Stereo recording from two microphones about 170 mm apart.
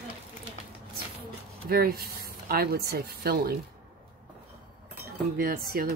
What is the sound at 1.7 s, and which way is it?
Speech, 65° right (ahead or behind).